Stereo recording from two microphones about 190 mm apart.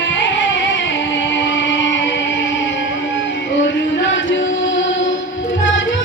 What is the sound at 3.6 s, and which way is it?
Music, 75° left (ahead or behind).